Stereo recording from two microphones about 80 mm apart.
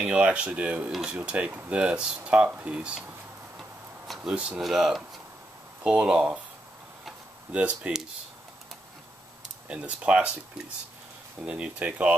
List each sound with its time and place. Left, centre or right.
0.0 s speech: centre
4.1 s speech: centre
7.5 s speech: centre
9.7 s speech: centre
11.4 s speech: centre